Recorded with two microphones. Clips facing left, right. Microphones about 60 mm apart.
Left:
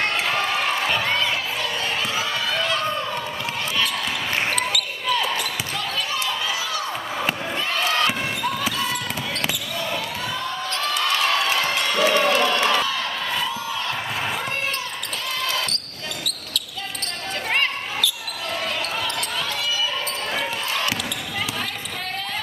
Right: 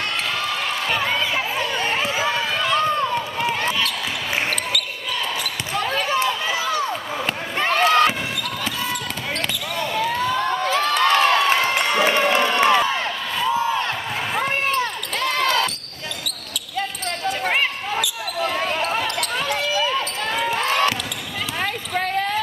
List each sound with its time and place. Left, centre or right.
0.9 s crowd: centre
1.6 s run: right
5.8 s basketball bounce: right
7.5 s a sound: right
10.4 s basketball bounce: right
13.5 s a sound: right
15.2 s basketball bounce: right
17.5 s basketball bounce: centre
20.5 s basketball bounce: right